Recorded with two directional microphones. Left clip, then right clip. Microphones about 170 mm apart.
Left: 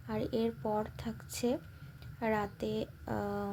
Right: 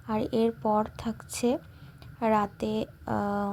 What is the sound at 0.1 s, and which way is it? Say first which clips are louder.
Speech: right 7 dB; 20° right (ahead or behind).